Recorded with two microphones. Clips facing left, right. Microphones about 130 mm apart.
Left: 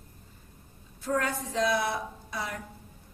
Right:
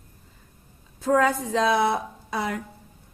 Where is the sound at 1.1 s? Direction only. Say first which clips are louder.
Right 9 dB; 90° right.